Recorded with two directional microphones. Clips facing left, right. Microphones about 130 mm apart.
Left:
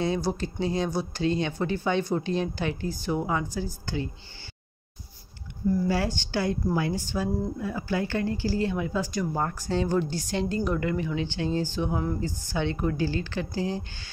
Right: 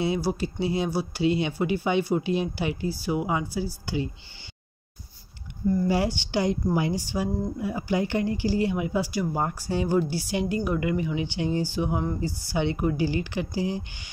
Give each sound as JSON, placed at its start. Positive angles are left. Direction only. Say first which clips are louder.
{"t": 0.0, "sound": "speech", "louder": "right 1 dB", "side_deg": -10}
{"t": 5.9, "sound": "speech", "louder": "right 2 dB", "side_deg": -15}